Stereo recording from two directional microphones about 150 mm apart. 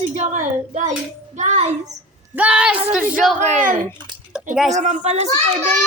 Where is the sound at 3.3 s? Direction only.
55° right (ahead or behind).